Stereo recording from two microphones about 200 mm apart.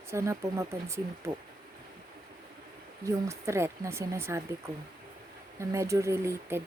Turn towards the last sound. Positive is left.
turn(degrees=-10)  # may be behind; listen again after turning